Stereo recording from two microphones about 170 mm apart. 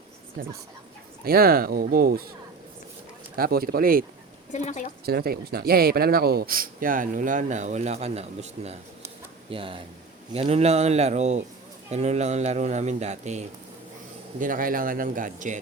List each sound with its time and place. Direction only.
1.2 s speech: 60° right (ahead or behind)
3.3 s speech: 60° right (ahead or behind)
4.5 s a woman's voice: 45° left (ahead or behind)
5.0 s speech: 65° right (ahead or behind)